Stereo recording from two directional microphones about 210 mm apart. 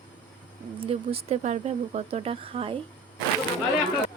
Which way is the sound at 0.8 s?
25° right (ahead or behind).